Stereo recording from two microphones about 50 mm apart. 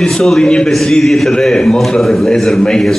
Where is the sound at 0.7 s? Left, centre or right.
Centre.